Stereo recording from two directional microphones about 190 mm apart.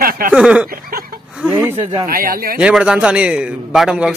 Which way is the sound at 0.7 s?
50° right (ahead or behind).